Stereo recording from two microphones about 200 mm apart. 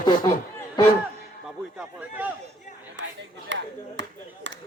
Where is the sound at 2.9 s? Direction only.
65° right (ahead or behind).